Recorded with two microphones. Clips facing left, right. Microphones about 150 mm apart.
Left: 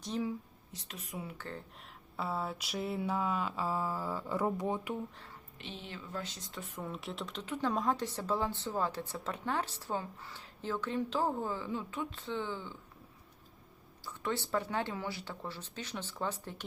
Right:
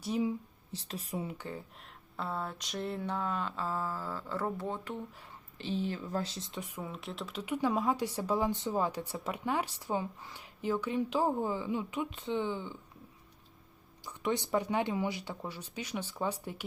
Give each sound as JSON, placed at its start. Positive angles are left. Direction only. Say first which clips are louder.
{"t": 0.0, "sound": "speech", "louder": "right 4 dB", "side_deg": -10}
{"t": 0.7, "sound": "speech", "louder": "right 6 dB", "side_deg": -35}
{"t": 1.8, "sound": "speech", "louder": "left 1 dB", "side_deg": 5}
{"t": 5.5, "sound": "speech", "louder": "right 11 dB", "side_deg": -35}
{"t": 6.6, "sound": "speech", "louder": "even", "side_deg": -10}
{"t": 14.0, "sound": "speech", "louder": "right 3 dB", "side_deg": -15}